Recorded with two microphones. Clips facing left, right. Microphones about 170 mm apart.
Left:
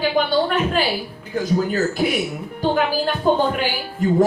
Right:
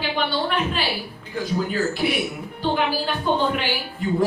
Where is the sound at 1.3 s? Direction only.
45° left (ahead or behind).